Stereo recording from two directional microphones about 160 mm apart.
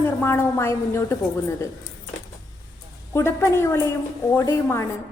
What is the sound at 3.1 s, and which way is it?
A woman's voice, 15° left (ahead or behind).